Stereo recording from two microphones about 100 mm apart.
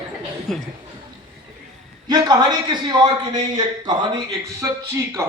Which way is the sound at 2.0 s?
50° right (ahead or behind).